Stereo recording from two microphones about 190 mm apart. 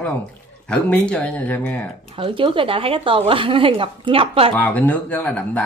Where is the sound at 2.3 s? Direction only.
25° right (ahead or behind).